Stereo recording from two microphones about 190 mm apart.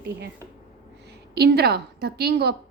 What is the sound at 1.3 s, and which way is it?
A woman's voice, 55° right (ahead or behind).